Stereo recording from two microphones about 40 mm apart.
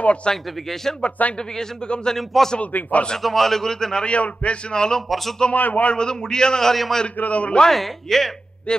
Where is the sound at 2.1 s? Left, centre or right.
Centre.